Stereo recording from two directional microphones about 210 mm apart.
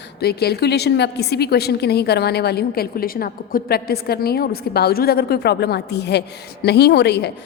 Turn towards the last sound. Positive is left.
turn(degrees=50)  # may be behind; listen again after turning